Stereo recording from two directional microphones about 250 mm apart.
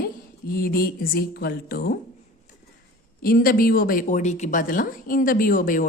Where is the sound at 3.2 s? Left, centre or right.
Left.